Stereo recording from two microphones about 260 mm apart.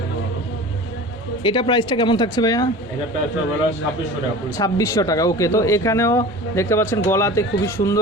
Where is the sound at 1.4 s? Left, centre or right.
Centre.